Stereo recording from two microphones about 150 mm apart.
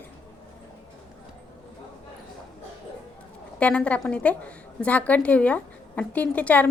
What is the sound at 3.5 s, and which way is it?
A woman's voice, 10° left (ahead or behind).